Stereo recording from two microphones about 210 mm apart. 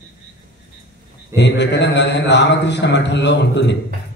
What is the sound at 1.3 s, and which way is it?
A man's voice, 55° left (ahead or behind).